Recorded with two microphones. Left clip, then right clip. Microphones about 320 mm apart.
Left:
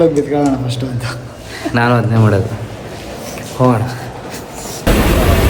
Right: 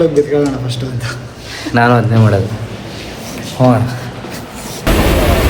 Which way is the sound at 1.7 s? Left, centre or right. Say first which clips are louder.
Right 3 dB; centre.